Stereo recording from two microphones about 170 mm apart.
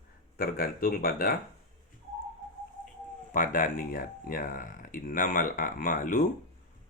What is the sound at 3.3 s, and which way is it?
Speech, 50° left (ahead or behind).